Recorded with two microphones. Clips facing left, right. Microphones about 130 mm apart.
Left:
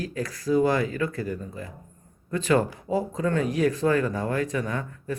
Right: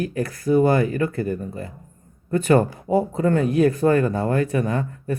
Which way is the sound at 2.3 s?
60° right (ahead or behind).